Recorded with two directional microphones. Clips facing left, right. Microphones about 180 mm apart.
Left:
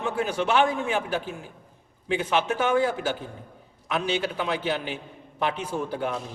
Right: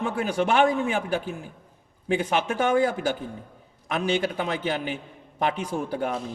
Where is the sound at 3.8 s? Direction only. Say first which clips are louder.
Right 2 dB; 50° right (ahead or behind).